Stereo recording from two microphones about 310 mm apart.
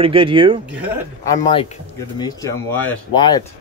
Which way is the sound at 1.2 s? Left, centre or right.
Centre.